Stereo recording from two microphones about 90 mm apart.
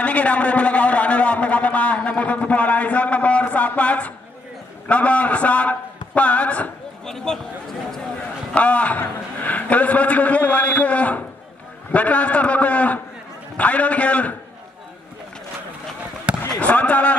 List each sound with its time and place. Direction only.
0.0 s a sound: 15° left (ahead or behind)
4.8 s a man's voice: 15° left (ahead or behind)
16.4 s speech: 15° left (ahead or behind)